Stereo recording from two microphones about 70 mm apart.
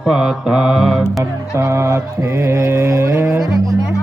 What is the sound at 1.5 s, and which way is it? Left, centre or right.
Mantra, right.